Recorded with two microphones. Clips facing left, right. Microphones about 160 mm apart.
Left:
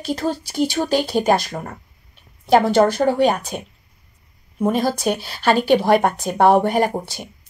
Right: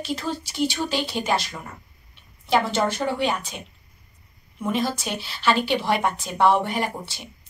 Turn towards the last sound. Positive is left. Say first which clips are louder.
# left 8 dB
turn(degrees=45)  # may be behind; listen again after turning